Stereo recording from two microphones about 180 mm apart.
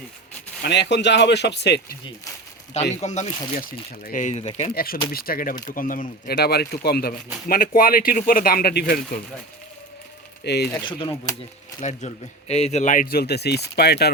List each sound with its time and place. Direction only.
0.6 s speech: 70° left (ahead or behind)
2.9 s speech: 40° left (ahead or behind)
3.7 s speech: 50° left (ahead or behind)
4.7 s speech: 55° left (ahead or behind)
10.4 s speech: 65° left (ahead or behind)
10.8 s speech: 25° left (ahead or behind)
11.8 s speech: 40° left (ahead or behind); by 14.1 s 65° left (ahead or behind)